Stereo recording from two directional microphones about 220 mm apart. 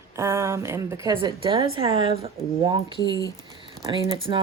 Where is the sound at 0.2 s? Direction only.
10° right (ahead or behind).